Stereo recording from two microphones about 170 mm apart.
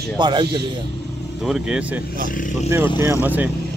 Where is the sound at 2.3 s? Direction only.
50° left (ahead or behind).